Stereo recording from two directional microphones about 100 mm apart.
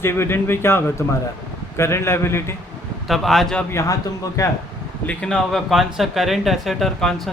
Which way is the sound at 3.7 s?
35° left (ahead or behind).